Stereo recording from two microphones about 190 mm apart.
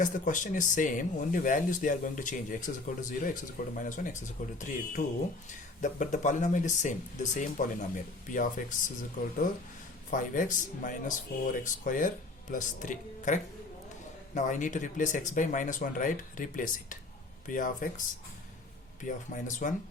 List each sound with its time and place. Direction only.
0.0 s speech: 45° left (ahead or behind)
10.1 s speech: 45° left (ahead or behind)
19.0 s speech: 40° left (ahead or behind)